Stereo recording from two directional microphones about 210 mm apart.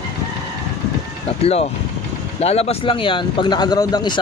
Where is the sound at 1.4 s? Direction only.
30° left (ahead or behind).